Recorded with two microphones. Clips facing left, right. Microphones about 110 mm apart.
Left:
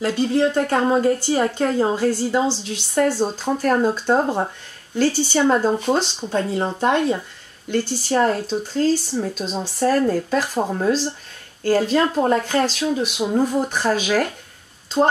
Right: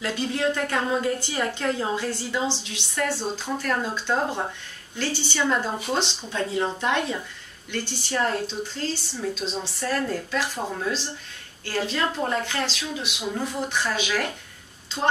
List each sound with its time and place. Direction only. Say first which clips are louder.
0.0 s a woman's voice: left 7 dB; 35° left (ahead or behind)